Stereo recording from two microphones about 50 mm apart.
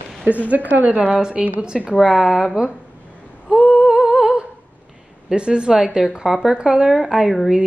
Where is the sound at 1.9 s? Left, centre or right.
Centre.